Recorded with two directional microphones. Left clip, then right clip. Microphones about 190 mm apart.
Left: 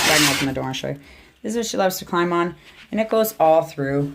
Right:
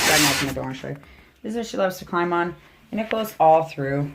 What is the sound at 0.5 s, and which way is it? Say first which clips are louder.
Speech: left 4 dB; 50° left (ahead or behind).